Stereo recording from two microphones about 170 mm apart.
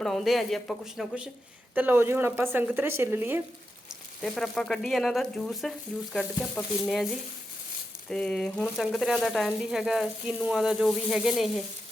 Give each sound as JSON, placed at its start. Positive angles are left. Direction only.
{"t": 0.0, "sound": "speech", "side_deg": 0}
{"t": 4.2, "sound": "speech", "side_deg": 0}
{"t": 8.1, "sound": "speech", "side_deg": 5}